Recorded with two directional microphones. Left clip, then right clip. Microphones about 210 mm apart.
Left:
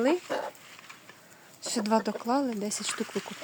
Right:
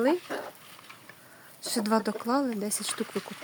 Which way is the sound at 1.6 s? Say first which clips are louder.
Even; 5° right (ahead or behind).